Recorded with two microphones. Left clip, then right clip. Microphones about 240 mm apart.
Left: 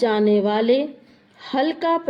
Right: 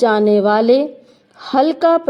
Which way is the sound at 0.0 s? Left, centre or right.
Right.